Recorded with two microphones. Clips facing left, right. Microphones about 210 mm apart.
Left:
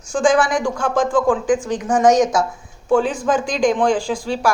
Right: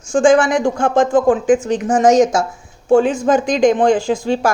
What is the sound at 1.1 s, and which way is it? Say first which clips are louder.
Speech: right 2 dB; 40° right (ahead or behind).